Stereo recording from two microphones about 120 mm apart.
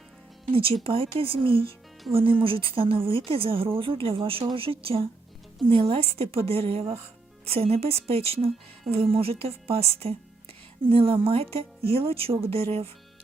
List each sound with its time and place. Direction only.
0.5 s speech: 50° right (ahead or behind)